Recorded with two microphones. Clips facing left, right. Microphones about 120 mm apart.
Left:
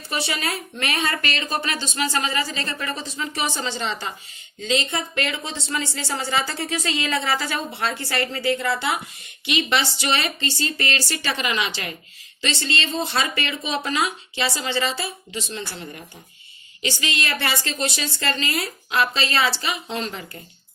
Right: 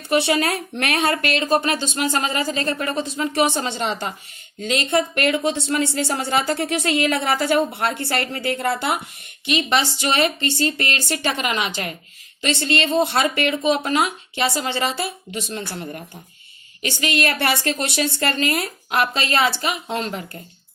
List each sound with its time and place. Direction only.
0.3 s speech: 60° right (ahead or behind)
1.2 s speech: 55° right (ahead or behind)
9.5 s speech: 40° right (ahead or behind)